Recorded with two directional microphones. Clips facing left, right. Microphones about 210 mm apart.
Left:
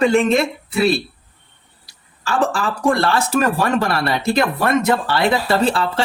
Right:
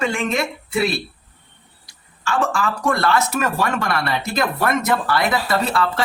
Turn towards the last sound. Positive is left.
turn(degrees=30)  # may be behind; listen again after turning